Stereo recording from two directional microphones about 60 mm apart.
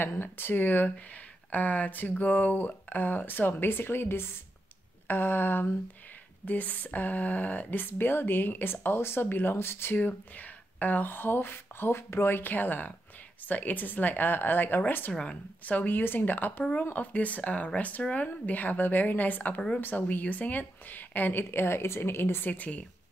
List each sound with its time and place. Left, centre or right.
0.0 s speech: left
9.9 s a woman's voice: left
22.5 s a woman's voice: left